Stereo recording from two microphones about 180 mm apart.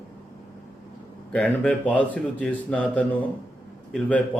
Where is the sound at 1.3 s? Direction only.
5° left (ahead or behind).